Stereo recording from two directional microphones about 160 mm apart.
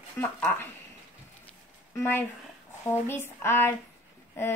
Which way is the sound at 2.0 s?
15° left (ahead or behind).